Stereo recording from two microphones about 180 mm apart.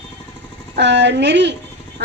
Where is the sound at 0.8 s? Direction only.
75° right (ahead or behind).